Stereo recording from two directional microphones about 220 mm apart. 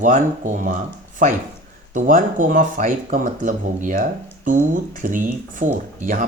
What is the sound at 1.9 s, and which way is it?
Speech, 35° right (ahead or behind).